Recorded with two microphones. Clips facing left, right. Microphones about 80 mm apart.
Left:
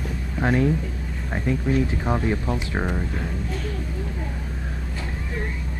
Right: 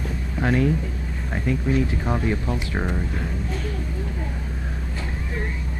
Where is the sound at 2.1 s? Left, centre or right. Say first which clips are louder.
Left 1 dB; left.